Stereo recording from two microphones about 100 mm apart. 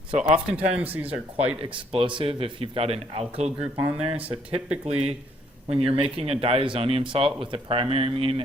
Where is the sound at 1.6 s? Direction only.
60° right (ahead or behind); by 3.7 s 90° right.